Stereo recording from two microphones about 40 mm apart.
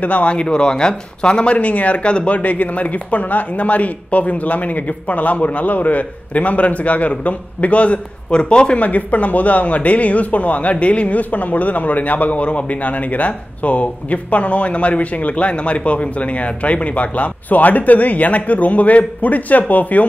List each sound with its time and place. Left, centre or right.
0.0 s speech: left
8.3 s speech: left
8.7 s speech: left